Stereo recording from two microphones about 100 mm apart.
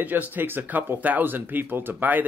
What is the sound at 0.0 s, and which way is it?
Speech, 20° right (ahead or behind).